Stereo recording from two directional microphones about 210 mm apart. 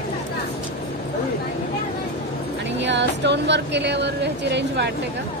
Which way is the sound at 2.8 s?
55° right (ahead or behind).